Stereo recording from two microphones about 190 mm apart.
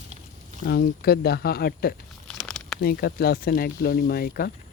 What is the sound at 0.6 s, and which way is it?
Speech, 55° left (ahead or behind).